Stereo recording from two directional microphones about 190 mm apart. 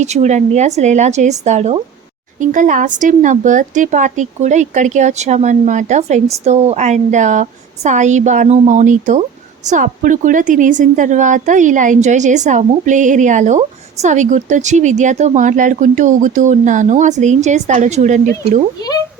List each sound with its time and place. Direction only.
0.0 s a woman's voice: 40° right (ahead or behind)